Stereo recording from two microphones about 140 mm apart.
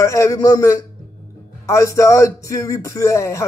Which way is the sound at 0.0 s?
20° left (ahead or behind).